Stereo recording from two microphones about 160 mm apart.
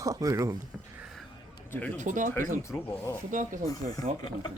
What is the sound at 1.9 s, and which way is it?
Speech, 50° right (ahead or behind).